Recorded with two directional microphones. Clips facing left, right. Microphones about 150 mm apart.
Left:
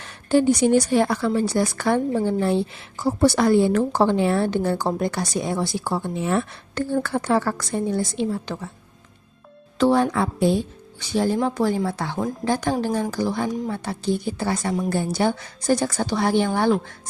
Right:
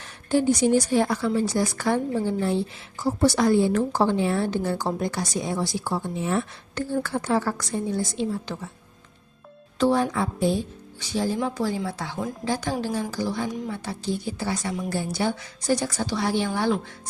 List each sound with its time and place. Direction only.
0.3 s a woman's voice: 65° left (ahead or behind)
9.7 s a woman's voice: 70° left (ahead or behind)